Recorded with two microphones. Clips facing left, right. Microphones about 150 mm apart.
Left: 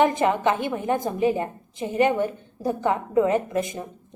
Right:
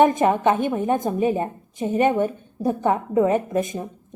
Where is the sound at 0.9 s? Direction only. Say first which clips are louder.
Left 1 dB; 20° right (ahead or behind).